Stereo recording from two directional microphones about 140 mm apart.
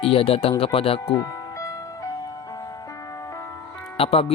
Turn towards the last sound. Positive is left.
turn(degrees=45)  # may be behind; listen again after turning